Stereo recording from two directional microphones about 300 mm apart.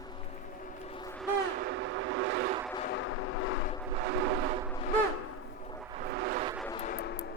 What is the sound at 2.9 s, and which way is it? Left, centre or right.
Vehicle, left.